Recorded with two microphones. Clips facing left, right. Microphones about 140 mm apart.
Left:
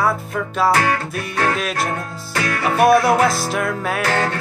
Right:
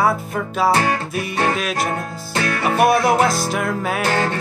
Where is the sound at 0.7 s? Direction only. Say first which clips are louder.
Even; 25° right (ahead or behind).